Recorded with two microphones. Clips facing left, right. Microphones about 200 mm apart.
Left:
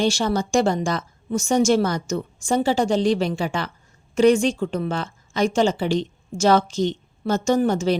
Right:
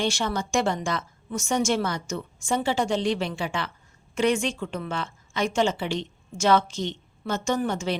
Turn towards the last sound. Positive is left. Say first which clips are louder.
# left 7 dB
turn(degrees=40)  # may be behind; listen again after turning